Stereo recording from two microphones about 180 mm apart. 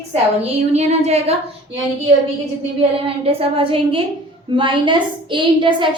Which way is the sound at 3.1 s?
30° right (ahead or behind).